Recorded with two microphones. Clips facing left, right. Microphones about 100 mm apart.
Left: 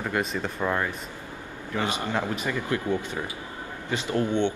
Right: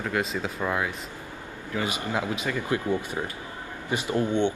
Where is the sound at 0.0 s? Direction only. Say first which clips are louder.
Even; centre (ahead or behind).